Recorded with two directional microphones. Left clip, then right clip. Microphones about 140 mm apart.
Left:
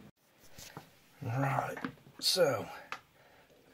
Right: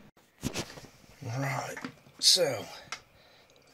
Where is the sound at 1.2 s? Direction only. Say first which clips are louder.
Left 1 dB; 5° left (ahead or behind).